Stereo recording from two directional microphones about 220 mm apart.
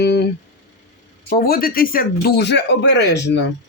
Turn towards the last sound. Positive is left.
turn(degrees=50)  # may be behind; listen again after turning